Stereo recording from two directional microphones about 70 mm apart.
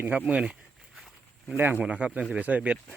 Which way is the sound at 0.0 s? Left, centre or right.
Right.